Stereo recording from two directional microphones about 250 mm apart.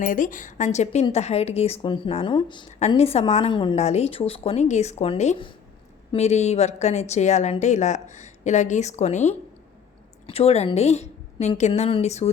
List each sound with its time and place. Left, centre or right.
0.0 s a woman's voice: left
10.2 s a woman's voice: left